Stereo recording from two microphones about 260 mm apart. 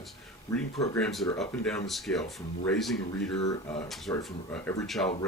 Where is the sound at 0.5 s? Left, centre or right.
Centre.